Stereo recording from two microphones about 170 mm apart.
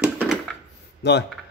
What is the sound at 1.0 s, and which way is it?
Speech, 80° left.